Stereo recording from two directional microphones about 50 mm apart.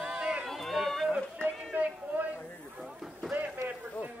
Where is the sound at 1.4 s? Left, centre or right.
Left.